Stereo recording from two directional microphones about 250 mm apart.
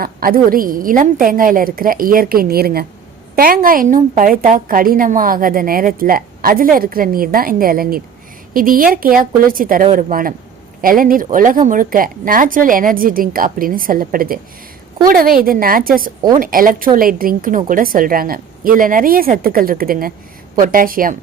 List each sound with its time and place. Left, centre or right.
0.0 s a woman's voice: right